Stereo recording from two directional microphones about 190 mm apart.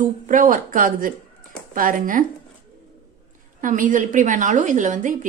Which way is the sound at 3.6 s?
45° right (ahead or behind).